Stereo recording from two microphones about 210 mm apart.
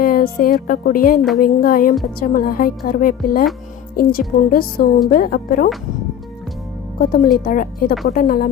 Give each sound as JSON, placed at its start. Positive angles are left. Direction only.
{"t": 0.0, "sound": "a woman's voice", "side_deg": 45}
{"t": 7.3, "sound": "a woman's voice", "side_deg": 40}